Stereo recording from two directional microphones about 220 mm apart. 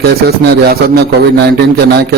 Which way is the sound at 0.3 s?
45° right (ahead or behind).